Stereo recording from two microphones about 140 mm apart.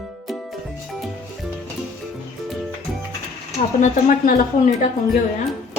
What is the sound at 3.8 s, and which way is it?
Speech, 70° left (ahead or behind).